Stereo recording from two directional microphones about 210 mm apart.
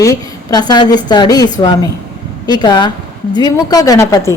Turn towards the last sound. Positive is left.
turn(degrees=15)  # may be behind; listen again after turning